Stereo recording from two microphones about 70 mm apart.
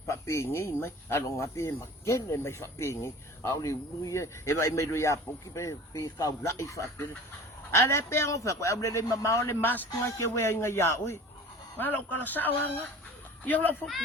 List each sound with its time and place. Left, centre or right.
0.1 s speech: left
10.1 s speech: left
11.8 s speech: left